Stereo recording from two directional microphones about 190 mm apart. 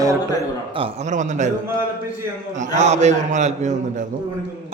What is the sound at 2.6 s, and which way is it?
A man's voice, 40° right (ahead or behind).